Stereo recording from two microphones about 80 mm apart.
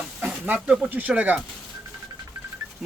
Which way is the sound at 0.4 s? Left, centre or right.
Centre.